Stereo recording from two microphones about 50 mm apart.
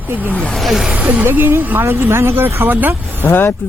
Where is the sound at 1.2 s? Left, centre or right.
Right.